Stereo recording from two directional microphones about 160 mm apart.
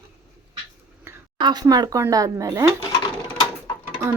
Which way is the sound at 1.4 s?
25° right (ahead or behind).